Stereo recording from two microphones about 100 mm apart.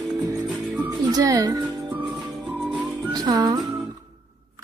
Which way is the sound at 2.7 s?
45° right (ahead or behind).